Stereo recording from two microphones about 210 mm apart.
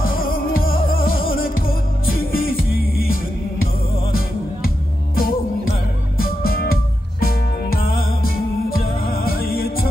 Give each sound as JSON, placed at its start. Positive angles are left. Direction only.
{"t": 0.3, "sound": "music", "side_deg": 45}
{"t": 5.1, "sound": "music", "side_deg": 45}